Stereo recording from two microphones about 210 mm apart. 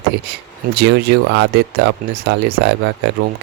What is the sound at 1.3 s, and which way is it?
Speech, 55° right (ahead or behind).